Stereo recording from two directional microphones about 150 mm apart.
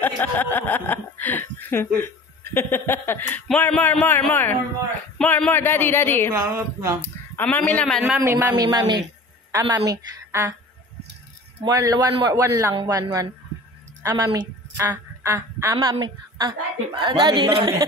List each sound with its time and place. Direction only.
0.0 s speech: 10° left (ahead or behind)
6.3 s a sound: 15° right (ahead or behind)
7.0 s speech: 15° left (ahead or behind)
8.2 s a sound: 15° right (ahead or behind)
8.5 s a man's voice: 25° right (ahead or behind)
11.6 s a man's voice: 25° right (ahead or behind)
14.0 s a man's voice: 20° right (ahead or behind)
15.7 s a woman's voice: 30° right (ahead or behind)